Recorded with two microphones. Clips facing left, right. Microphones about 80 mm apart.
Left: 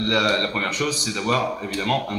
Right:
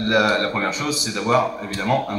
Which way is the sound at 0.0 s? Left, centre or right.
Right.